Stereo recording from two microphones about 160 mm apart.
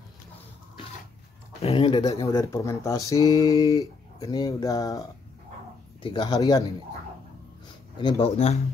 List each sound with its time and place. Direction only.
1.6 s speech: 35° left (ahead or behind)
2.2 s speech: 20° left (ahead or behind)
6.0 s speech: 25° left (ahead or behind)
8.0 s speech: 30° left (ahead or behind)